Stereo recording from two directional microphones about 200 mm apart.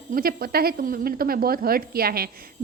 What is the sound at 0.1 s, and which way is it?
A woman's voice, 45° right (ahead or behind).